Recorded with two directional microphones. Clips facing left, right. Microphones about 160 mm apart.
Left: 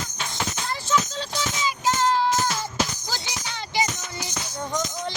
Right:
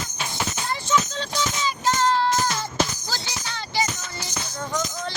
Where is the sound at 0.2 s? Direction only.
5° right (ahead or behind).